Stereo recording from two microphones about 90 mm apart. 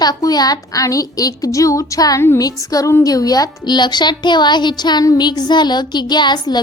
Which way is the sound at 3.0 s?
45° left (ahead or behind).